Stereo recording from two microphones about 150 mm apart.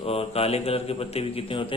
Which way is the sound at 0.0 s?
40° left (ahead or behind).